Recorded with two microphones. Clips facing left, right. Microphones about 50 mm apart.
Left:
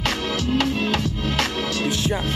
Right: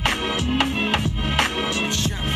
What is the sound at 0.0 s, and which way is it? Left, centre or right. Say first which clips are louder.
Music: right 1 dB; right.